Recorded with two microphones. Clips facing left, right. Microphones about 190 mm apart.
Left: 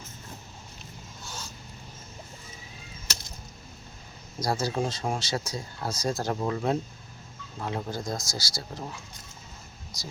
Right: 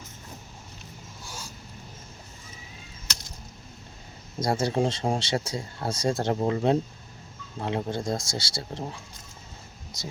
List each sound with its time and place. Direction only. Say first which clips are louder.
1.2 s a sound: even; 10° right (ahead or behind)
4.4 s speech: right 3 dB; 25° right (ahead or behind)
10.0 s speech: right 4 dB; 25° right (ahead or behind)